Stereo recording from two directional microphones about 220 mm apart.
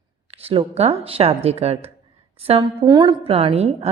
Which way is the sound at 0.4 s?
25° right (ahead or behind).